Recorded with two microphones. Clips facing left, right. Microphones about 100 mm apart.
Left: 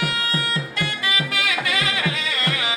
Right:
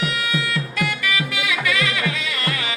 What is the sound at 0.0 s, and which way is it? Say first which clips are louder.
Music: right 1 dB; 40° left (ahead or behind).